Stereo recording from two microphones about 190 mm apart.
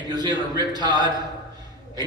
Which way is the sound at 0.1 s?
20° right (ahead or behind).